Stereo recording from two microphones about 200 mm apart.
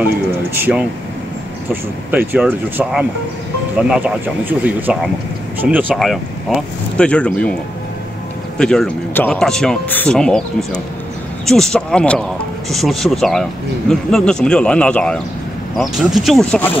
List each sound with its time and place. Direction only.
0.6 s speech: 10° right (ahead or behind)
8.5 s speech: 5° left (ahead or behind)